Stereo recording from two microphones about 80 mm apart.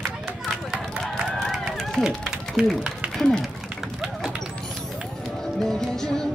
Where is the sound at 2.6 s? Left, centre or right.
Centre.